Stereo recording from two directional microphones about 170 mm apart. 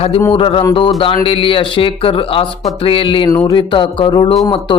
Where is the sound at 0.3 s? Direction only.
30° left (ahead or behind).